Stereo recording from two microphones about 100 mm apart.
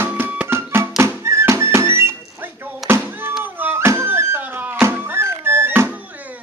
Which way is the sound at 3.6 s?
25° right (ahead or behind).